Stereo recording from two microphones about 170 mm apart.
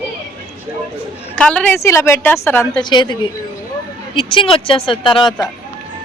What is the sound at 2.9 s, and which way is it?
A woman's voice, 25° left (ahead or behind).